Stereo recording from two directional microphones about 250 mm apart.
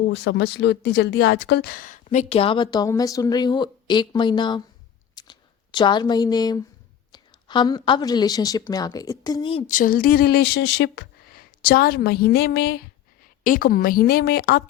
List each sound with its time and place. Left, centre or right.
0.0 s speech: left; by 4.6 s centre
5.1 s a sound: centre
7.1 s a woman's voice: centre; by 14.6 s left